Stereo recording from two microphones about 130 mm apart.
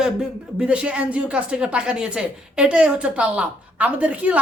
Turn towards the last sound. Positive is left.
turn(degrees=-10)  # may be behind; listen again after turning